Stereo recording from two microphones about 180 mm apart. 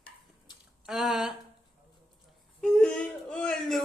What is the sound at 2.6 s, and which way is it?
Whimper, 5° left (ahead or behind).